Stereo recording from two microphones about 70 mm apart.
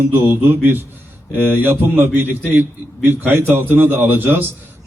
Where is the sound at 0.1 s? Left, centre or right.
Right.